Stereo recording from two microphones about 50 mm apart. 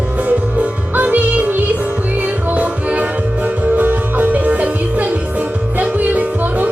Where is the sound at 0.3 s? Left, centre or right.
Right.